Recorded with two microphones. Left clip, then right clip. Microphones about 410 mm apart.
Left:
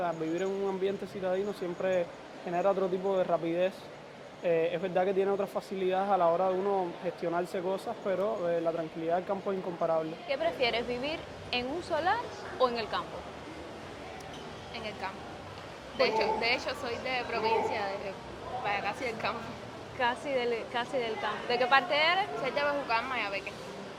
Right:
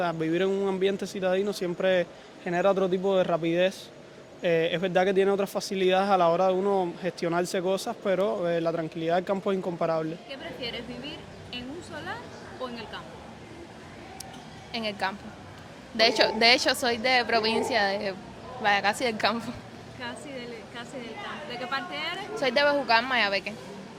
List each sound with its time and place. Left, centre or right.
0.0 s speech: right
10.2 s a woman's voice: centre
14.7 s speech: right
20.0 s a woman's voice: centre
22.4 s speech: right